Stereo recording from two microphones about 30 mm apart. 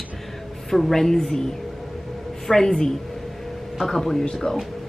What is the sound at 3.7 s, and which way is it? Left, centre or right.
Speech, centre.